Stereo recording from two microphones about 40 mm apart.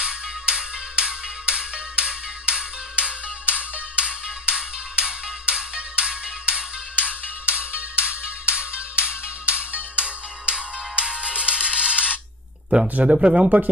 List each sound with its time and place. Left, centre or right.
0.0 s music: right
7.0 s music: right
13.0 s speech: right